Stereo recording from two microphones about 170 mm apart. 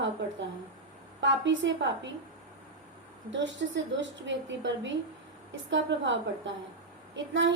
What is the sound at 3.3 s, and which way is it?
A woman's voice, 90° right.